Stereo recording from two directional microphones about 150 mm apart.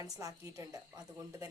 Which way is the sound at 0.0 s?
20° right (ahead or behind).